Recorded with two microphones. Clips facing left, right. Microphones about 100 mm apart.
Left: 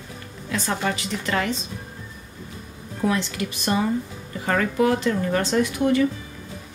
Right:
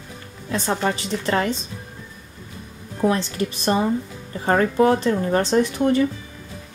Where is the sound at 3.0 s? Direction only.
35° right (ahead or behind).